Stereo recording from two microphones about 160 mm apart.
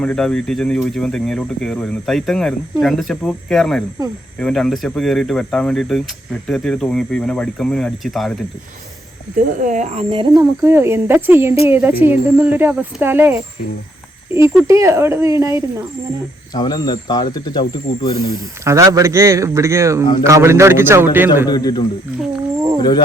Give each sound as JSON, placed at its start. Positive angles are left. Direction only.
{"t": 0.0, "sound": "speech", "side_deg": 5}
{"t": 9.3, "sound": "speech", "side_deg": -55}
{"t": 10.6, "sound": "speech", "side_deg": -15}
{"t": 14.5, "sound": "speech", "side_deg": -20}
{"t": 16.6, "sound": "speech", "side_deg": 25}
{"t": 18.6, "sound": "speech", "side_deg": -20}
{"t": 21.4, "sound": "speech", "side_deg": 25}